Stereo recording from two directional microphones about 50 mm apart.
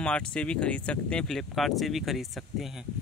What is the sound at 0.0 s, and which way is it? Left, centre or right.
Speech, left.